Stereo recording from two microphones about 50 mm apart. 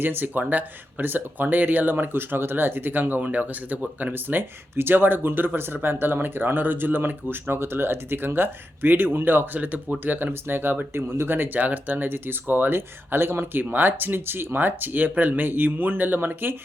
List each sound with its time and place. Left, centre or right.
0.0 s speech: right
11.6 s speech: right